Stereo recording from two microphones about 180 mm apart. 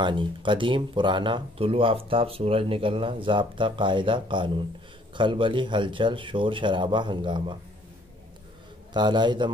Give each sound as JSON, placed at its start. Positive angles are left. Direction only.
{"t": 0.0, "sound": "speech", "side_deg": -25}
{"t": 8.9, "sound": "speech", "side_deg": -25}